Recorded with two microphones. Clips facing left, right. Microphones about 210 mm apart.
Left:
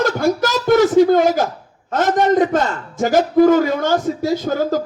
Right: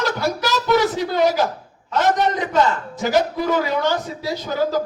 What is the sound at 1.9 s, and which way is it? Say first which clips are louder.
A man's voice: left 4 dB; 50° left (ahead or behind).